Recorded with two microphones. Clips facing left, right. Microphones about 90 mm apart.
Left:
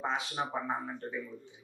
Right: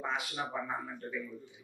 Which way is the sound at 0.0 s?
25° left (ahead or behind).